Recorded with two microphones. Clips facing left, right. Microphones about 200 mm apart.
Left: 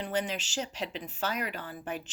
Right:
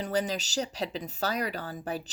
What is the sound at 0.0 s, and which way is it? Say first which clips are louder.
Speech: right 3 dB; 40° right (ahead or behind).